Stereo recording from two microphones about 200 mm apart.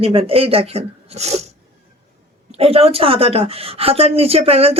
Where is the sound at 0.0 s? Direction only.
30° right (ahead or behind).